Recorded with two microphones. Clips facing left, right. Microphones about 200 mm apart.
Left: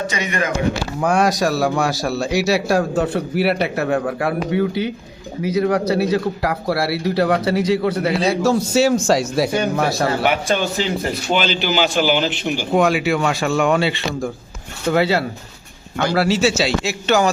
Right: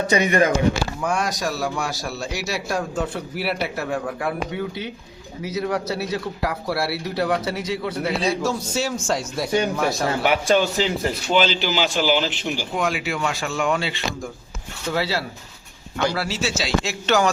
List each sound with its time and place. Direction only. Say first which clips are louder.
1.0 s speech: left 9 dB; 70° left (ahead or behind)
8.4 s speech: left 9 dB; 75° left (ahead or behind)
9.6 s speech: left 3 dB; 60° left (ahead or behind)
16.0 s speech: left 8 dB; 70° left (ahead or behind)
16.8 s speech: left 2 dB; 5° left (ahead or behind)